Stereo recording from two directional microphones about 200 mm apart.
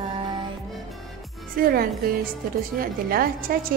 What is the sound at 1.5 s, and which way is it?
A woman's voice, 50° right (ahead or behind).